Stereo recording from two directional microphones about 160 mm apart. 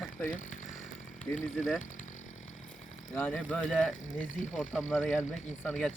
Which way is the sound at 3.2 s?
10° left (ahead or behind).